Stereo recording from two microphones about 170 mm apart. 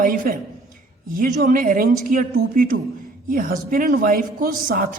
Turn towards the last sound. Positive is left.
turn(degrees=-55)  # may be behind; listen again after turning